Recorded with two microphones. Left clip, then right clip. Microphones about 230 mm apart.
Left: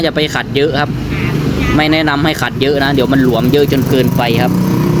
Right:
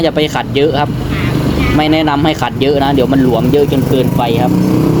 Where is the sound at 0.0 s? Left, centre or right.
Centre.